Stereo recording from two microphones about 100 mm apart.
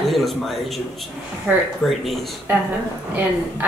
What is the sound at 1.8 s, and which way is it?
Speech, centre (ahead or behind).